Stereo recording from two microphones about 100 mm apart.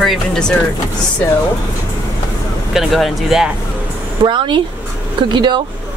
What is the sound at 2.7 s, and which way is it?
Speech, centre (ahead or behind).